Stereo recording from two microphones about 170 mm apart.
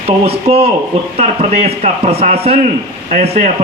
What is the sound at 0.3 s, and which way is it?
A man's voice, 35° right (ahead or behind).